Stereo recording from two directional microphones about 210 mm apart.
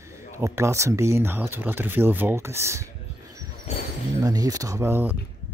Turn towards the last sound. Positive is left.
turn(degrees=-10)  # may be behind; listen again after turning